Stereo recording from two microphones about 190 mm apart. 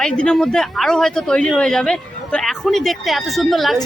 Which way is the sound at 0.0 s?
5° left (ahead or behind).